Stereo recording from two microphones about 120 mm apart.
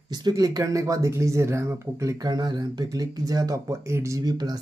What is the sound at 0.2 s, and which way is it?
Speech, 30° right (ahead or behind).